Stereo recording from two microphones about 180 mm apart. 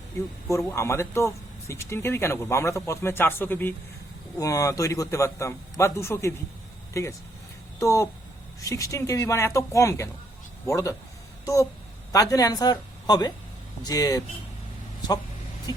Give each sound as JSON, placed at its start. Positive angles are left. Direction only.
{"t": 0.6, "sound": "speech", "side_deg": 15}